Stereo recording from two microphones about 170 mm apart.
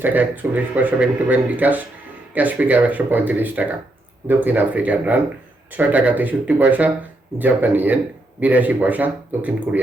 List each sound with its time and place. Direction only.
0.0 s speech: 10° right (ahead or behind)